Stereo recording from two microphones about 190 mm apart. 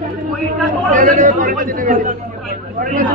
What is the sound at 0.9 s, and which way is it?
A man's voice, 45° right (ahead or behind).